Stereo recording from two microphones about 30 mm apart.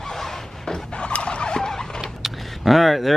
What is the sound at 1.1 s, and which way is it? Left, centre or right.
Turkey, left.